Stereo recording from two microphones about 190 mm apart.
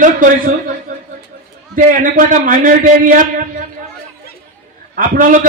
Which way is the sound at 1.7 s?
45° right (ahead or behind).